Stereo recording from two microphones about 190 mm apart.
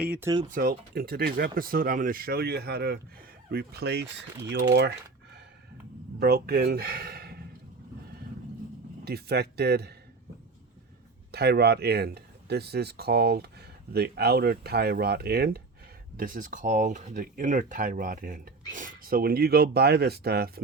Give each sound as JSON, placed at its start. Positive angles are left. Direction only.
{"t": 0.0, "sound": "speech", "side_deg": -5}
{"t": 0.4, "sound": "speech", "side_deg": -50}
{"t": 9.0, "sound": "speech", "side_deg": -60}
{"t": 11.3, "sound": "speech", "side_deg": -60}